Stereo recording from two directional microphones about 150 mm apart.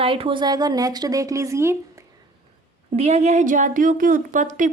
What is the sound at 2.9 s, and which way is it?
A woman's voice, 45° right (ahead or behind).